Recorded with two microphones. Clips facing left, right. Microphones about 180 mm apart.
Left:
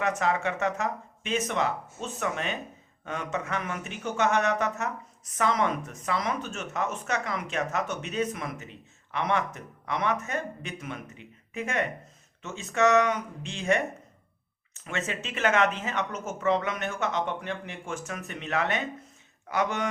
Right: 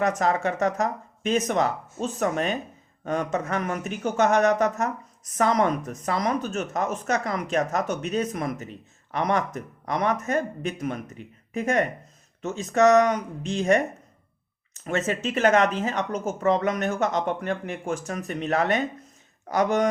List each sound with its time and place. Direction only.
0.2 s a woman's voice: 40° right (ahead or behind)